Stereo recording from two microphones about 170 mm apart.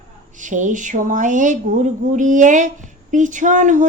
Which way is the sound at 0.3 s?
50° right (ahead or behind).